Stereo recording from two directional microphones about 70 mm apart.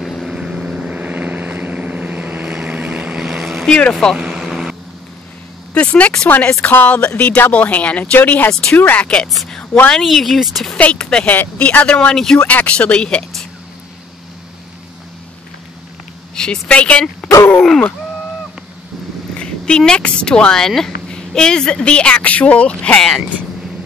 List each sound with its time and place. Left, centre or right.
0.0 s vehicle: centre
0.3 s vehicle: centre
3.3 s vehicle: centre
3.6 s speech: centre
4.2 s vehicle: centre
5.8 s speech: centre
8.5 s speech: centre
8.7 s speech: left
9.3 s speech: centre
10.8 s speech: centre
16.3 s speech: centre
17.2 s groan: centre
17.6 s speech: centre
19.3 s speech: centre